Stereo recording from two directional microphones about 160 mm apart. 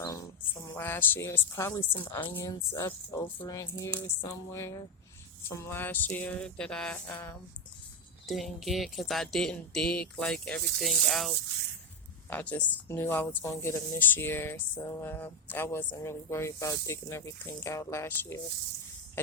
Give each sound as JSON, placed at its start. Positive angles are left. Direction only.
{"t": 0.0, "sound": "speech", "side_deg": 20}
{"t": 8.3, "sound": "speech", "side_deg": 0}